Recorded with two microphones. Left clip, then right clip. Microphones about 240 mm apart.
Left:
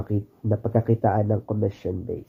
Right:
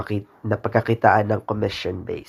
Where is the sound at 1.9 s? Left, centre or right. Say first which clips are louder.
Right 2 dB; right.